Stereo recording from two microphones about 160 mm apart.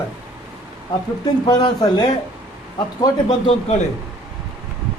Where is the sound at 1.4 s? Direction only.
25° left (ahead or behind).